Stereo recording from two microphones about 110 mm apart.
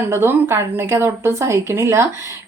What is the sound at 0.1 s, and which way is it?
A woman's voice, 20° right (ahead or behind).